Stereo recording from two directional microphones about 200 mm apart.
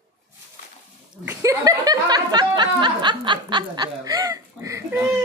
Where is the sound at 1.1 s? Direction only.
10° right (ahead or behind).